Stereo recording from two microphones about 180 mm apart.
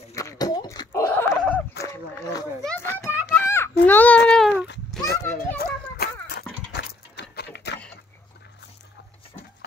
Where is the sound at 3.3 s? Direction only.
10° left (ahead or behind).